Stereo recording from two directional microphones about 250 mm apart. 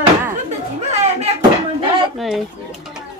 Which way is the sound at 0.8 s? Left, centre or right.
Right.